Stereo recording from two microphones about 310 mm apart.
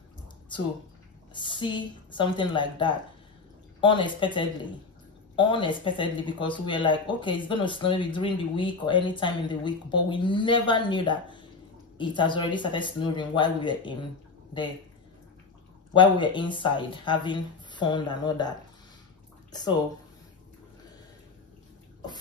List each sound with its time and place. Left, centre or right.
1.3 s speech: centre
15.9 s speech: centre